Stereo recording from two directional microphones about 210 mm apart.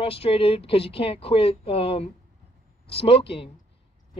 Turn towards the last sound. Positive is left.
turn(degrees=25)  # may be behind; listen again after turning